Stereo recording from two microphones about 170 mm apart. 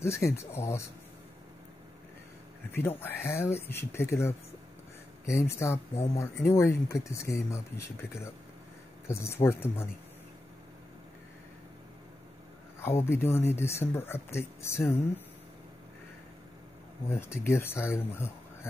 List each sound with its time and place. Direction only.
0.0 s speech: 15° left (ahead or behind)
3.0 s speech: 15° left (ahead or behind)
12.8 s speech: 15° left (ahead or behind)
17.1 s speech: 15° left (ahead or behind)